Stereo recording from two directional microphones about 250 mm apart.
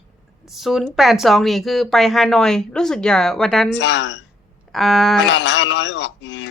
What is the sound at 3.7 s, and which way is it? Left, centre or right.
Speech, left.